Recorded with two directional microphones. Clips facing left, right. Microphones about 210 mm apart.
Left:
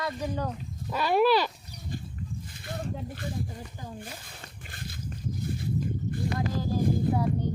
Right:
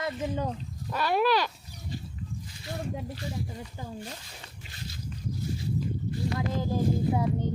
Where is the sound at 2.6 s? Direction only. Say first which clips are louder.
Right 1 dB; 55° left (ahead or behind).